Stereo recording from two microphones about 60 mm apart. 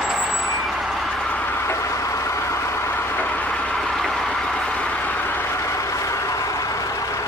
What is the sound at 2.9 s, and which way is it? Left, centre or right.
Vehicle, left.